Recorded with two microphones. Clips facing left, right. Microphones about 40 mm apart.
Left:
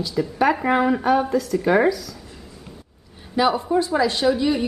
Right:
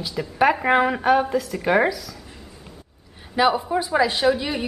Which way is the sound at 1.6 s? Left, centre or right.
Centre.